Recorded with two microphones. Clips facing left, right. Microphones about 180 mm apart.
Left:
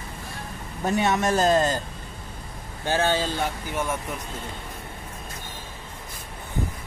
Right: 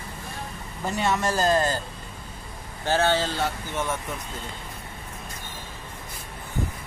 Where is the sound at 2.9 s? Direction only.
15° left (ahead or behind).